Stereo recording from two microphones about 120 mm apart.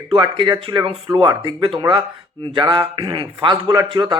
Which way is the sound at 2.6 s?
35° right (ahead or behind).